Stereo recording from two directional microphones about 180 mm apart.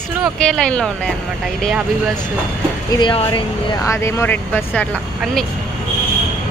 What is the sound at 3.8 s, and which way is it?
Speech, 15° left (ahead or behind).